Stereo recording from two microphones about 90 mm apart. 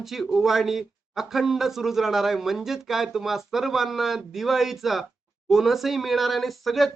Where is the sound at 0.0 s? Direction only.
Centre (ahead or behind).